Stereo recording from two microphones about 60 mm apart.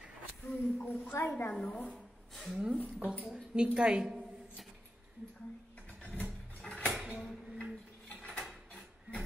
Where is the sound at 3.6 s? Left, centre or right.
Centre.